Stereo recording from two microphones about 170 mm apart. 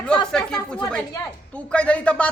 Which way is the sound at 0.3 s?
5° left (ahead or behind).